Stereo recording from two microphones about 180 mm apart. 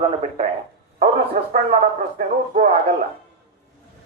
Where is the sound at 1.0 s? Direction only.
60° right (ahead or behind).